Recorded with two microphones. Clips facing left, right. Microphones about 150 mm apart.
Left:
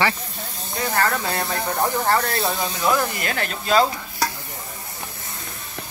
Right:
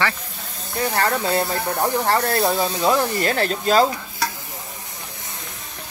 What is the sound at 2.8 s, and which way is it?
Speech, 30° right (ahead or behind).